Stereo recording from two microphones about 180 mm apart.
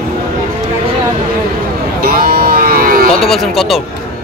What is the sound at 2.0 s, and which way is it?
Vehicle, 55° right (ahead or behind).